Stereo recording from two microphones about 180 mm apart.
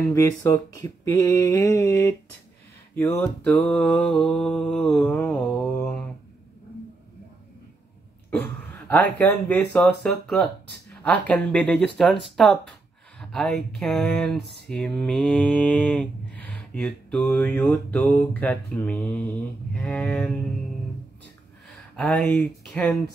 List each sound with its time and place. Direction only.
0.0 s mantra: 15° left (ahead or behind)
3.2 s mantra: 10° left (ahead or behind)
8.3 s speech: 10° left (ahead or behind)
11.0 s mantra: 10° left (ahead or behind)
13.2 s speech: 5° left (ahead or behind)
21.6 s speech: 5° left (ahead or behind)